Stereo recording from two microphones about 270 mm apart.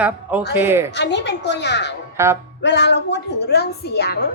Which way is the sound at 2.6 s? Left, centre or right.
Left.